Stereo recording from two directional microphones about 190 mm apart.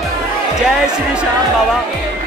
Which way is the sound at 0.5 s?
5° right (ahead or behind).